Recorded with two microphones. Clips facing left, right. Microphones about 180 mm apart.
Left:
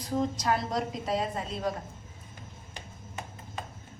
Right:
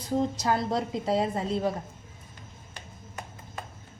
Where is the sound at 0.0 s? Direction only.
30° right (ahead or behind).